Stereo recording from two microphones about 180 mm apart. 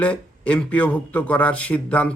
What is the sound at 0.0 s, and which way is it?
Speech, 5° left (ahead or behind).